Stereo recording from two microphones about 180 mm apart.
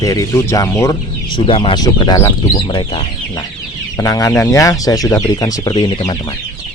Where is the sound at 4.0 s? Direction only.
20° left (ahead or behind).